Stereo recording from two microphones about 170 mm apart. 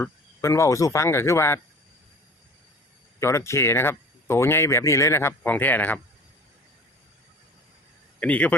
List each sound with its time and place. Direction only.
0.0 s speech: 15° left (ahead or behind)
3.2 s speech: 15° left (ahead or behind)
8.2 s speech: 10° left (ahead or behind)